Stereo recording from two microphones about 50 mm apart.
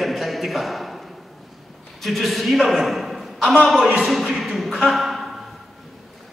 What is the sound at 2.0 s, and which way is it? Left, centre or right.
A man's voice, centre.